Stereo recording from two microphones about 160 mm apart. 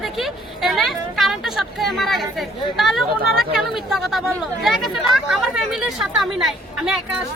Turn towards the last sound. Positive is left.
turn(degrees=0)  # may be behind; listen again after turning